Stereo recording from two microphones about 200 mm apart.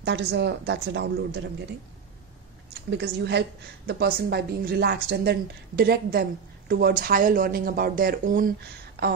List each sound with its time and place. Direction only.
0.0 s a woman's voice: 60° right (ahead or behind)
2.9 s a woman's voice: 60° right (ahead or behind); by 8.5 s 45° right (ahead or behind)